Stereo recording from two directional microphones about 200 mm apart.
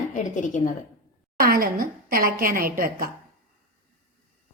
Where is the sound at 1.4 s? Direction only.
45° right (ahead or behind).